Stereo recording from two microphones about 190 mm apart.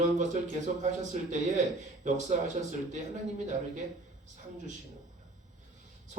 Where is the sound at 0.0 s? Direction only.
40° right (ahead or behind).